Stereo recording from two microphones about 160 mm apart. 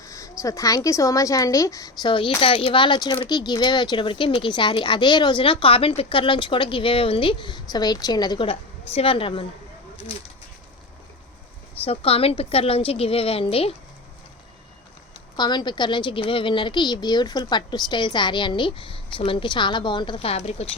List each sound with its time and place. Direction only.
0.0 s a woman's voice: 20° left (ahead or behind)
11.9 s speech: 35° left (ahead or behind)
15.4 s a woman's voice: 25° left (ahead or behind)